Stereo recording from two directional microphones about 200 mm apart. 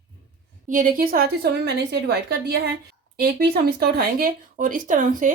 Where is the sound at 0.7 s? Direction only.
40° right (ahead or behind).